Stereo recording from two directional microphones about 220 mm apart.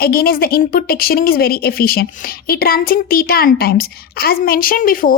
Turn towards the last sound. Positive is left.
turn(degrees=40)  # may be behind; listen again after turning